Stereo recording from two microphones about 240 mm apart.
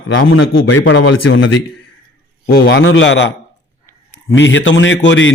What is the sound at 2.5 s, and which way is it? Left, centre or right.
Speech, left.